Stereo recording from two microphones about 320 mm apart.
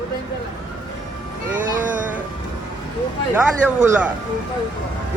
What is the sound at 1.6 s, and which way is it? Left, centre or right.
Speech, right.